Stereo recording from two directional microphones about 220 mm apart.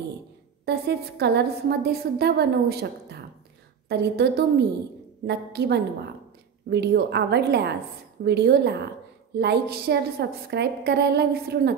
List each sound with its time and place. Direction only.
0.7 s a woman's voice: 50° right (ahead or behind)